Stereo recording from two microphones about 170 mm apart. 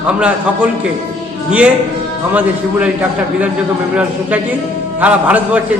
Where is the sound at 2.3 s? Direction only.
10° right (ahead or behind).